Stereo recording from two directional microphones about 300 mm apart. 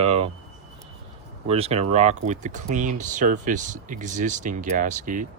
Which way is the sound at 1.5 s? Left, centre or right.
Centre.